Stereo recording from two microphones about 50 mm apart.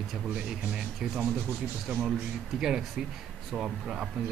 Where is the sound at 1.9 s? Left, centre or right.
Centre.